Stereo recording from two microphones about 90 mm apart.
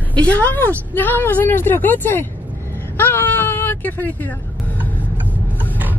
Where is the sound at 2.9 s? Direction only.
20° left (ahead or behind).